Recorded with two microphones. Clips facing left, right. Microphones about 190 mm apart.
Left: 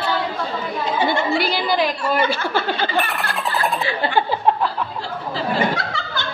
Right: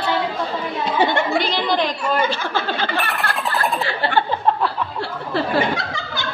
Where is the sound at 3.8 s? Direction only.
15° left (ahead or behind).